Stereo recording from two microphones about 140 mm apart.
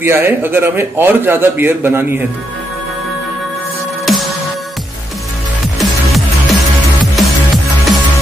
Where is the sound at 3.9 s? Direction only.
Centre (ahead or behind).